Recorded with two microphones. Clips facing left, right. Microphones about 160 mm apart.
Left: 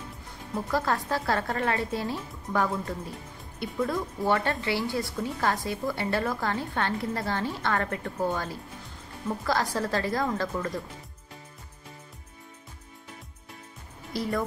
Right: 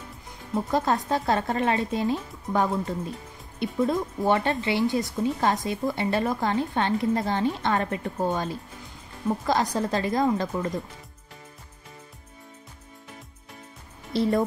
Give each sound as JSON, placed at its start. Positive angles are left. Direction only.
{"t": 0.7, "sound": "speech", "side_deg": -20}
{"t": 14.1, "sound": "speech", "side_deg": -25}